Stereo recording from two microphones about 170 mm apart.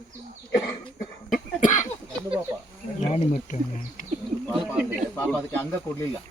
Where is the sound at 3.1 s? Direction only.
40° left (ahead or behind).